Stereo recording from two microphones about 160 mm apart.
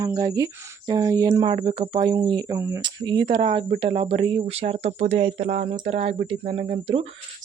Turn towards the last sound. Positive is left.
turn(degrees=-35)  # may be behind; listen again after turning